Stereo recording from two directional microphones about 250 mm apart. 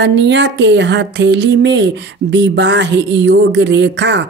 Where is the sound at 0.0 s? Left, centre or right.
Right.